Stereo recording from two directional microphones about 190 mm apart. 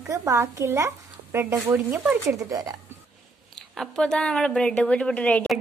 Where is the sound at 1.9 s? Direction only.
5° right (ahead or behind).